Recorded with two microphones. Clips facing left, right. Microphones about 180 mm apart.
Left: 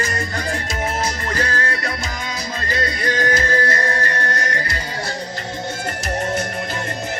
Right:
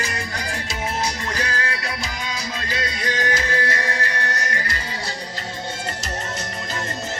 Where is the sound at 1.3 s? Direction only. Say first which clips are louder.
Left 4 dB; 45° left (ahead or behind).